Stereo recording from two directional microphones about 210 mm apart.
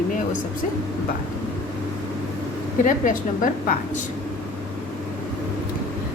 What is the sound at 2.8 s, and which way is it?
A woman's voice, 40° left (ahead or behind).